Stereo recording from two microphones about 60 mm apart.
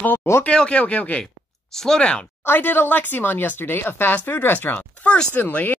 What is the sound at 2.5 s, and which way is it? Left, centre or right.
Speech, left.